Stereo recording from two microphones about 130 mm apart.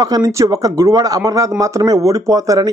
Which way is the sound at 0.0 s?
30° right (ahead or behind).